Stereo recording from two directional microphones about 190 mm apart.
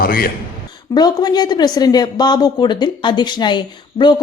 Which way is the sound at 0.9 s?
20° left (ahead or behind).